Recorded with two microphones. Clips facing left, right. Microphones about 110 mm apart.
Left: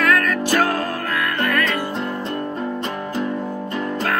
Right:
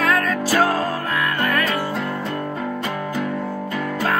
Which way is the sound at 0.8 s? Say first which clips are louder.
Right 1 dB; 10° right (ahead or behind).